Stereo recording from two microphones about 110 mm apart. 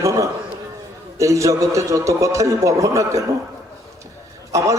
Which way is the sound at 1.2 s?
30° right (ahead or behind).